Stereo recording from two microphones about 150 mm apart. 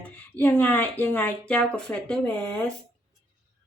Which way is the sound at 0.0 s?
10° left (ahead or behind).